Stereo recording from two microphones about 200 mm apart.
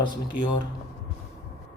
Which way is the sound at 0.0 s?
20° left (ahead or behind).